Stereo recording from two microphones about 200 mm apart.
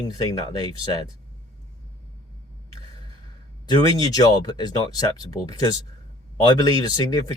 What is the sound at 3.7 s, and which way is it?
Speech, 20° left (ahead or behind).